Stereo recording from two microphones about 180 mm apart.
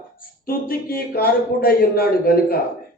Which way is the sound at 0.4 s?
55° left (ahead or behind).